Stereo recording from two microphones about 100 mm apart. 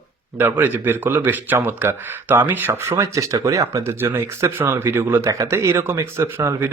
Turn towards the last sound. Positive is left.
turn(degrees=-25)  # may be behind; listen again after turning